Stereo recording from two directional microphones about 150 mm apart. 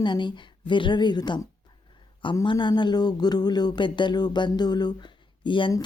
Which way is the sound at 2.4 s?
30° left (ahead or behind).